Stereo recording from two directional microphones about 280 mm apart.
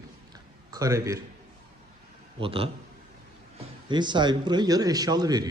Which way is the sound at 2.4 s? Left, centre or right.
Centre.